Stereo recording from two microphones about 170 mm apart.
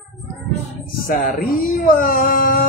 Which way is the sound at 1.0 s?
55° left (ahead or behind).